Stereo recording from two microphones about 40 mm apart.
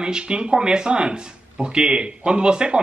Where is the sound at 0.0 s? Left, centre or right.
Right.